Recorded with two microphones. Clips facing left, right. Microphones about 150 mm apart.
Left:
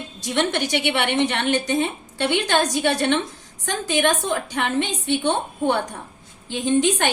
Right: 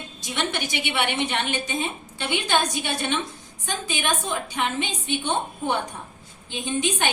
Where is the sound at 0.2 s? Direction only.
70° left (ahead or behind).